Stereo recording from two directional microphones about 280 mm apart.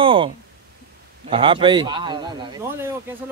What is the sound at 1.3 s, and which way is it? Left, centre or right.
Speech, centre.